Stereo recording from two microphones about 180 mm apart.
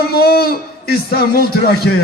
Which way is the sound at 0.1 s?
60° left (ahead or behind).